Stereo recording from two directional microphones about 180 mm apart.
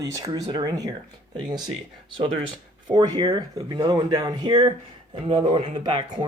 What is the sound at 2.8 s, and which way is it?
Speech, 25° right (ahead or behind).